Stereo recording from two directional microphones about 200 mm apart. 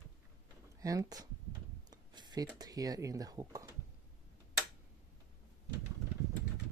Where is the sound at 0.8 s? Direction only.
15° right (ahead or behind).